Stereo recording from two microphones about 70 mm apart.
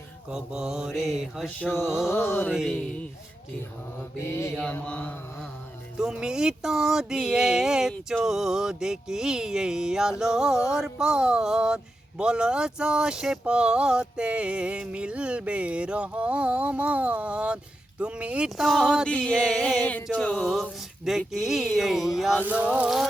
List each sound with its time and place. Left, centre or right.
0.3 s speech: centre
2.0 s mantra: left
2.5 s speech: centre
2.7 s a sound: centre
4.2 s mantra: left
4.7 s mantra: left
6.0 s speech: centre
18.5 s speech: centre
19.0 s a sound: centre
19.8 s mantra: centre
20.1 s a sound: centre
20.5 s speech: centre
22.4 s a sound: centre